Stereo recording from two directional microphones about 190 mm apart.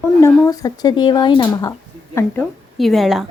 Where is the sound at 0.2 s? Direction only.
15° left (ahead or behind).